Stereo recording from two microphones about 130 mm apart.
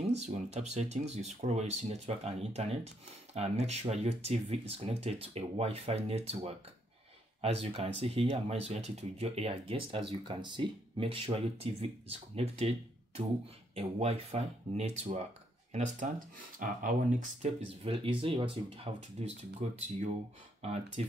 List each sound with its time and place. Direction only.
0.2 s speech: 60° right (ahead or behind)
15.7 s speech: 70° right (ahead or behind)